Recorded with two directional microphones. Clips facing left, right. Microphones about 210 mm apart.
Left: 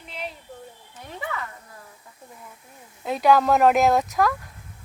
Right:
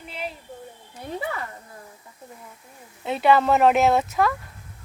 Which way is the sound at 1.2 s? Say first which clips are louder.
Even; 35° right (ahead or behind).